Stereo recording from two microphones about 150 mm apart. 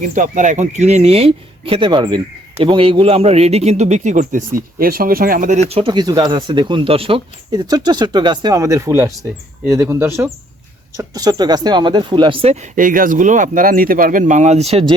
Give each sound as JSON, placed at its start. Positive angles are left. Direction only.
{"t": 0.0, "sound": "a man's voice", "side_deg": -55}
{"t": 7.5, "sound": "a man's voice", "side_deg": -25}